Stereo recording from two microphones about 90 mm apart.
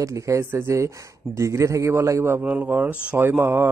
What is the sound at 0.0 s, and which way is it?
Speech, 35° right (ahead or behind).